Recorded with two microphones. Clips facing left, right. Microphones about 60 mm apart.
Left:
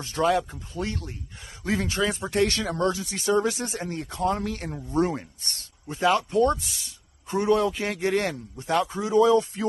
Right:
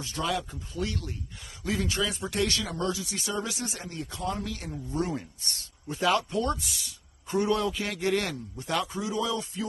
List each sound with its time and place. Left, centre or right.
0.0 s speech: left
5.9 s speech: left